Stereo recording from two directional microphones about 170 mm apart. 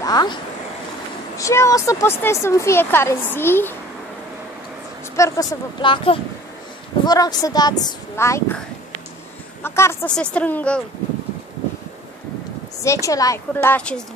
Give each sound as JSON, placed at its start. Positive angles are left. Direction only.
{"t": 0.0, "sound": "a sound", "side_deg": 25}
{"t": 1.4, "sound": "speech", "side_deg": 15}
{"t": 5.1, "sound": "a woman's voice", "side_deg": 20}
{"t": 9.6, "sound": "speech", "side_deg": 15}
{"t": 12.8, "sound": "speech", "side_deg": 20}